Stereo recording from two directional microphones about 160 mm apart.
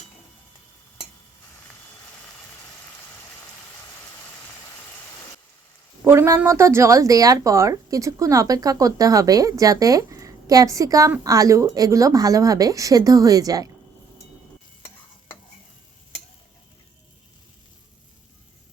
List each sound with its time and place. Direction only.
6.1 s speech: 15° right (ahead or behind)